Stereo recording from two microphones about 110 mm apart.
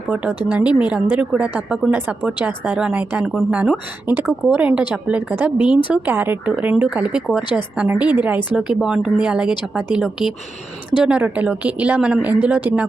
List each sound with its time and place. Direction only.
0.5 s speech: 10° right (ahead or behind)